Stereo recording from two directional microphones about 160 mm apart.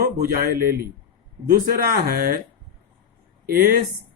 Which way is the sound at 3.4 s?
70° right (ahead or behind).